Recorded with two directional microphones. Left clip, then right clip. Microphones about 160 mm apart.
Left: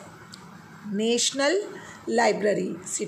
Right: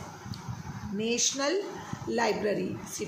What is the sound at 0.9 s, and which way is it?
Speech, 50° left (ahead or behind).